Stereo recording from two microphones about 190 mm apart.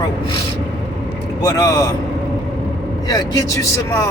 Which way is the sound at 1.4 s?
20° left (ahead or behind).